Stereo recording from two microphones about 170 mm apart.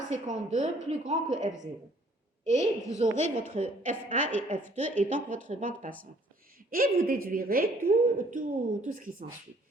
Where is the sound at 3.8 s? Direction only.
45° right (ahead or behind).